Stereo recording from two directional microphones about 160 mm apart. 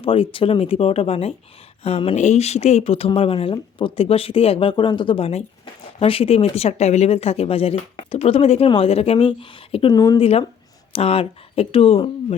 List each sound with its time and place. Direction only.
0.0 s speech: 35° left (ahead or behind)
10.9 s speech: 35° left (ahead or behind)